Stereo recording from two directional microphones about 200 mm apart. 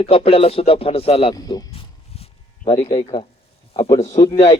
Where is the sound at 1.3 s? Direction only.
20° left (ahead or behind).